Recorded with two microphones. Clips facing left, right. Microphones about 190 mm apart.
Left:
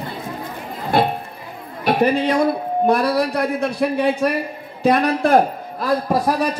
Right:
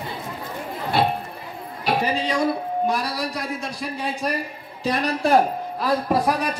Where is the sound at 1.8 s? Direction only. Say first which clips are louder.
Left 6 dB; 55° left (ahead or behind).